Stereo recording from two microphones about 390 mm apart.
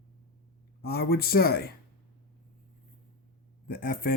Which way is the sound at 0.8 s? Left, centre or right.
Left.